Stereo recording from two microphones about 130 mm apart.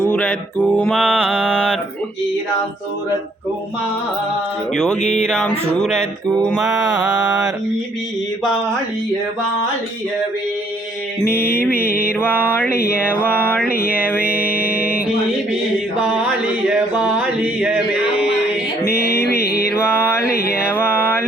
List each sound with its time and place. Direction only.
0.0 s mantra: 15° left (ahead or behind)
0.9 s speech: 5° left (ahead or behind)
4.7 s speech: 5° left (ahead or behind)
11.2 s mantra: 20° left (ahead or behind)
13.7 s mantra: 10° right (ahead or behind)
14.4 s music: 10° right (ahead or behind)
16.6 s mantra: 10° right (ahead or behind)
19.7 s mantra: 20° left (ahead or behind)